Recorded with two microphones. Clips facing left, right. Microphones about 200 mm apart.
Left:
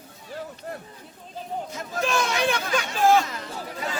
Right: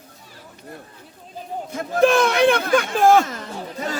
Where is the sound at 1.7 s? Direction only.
55° right (ahead or behind).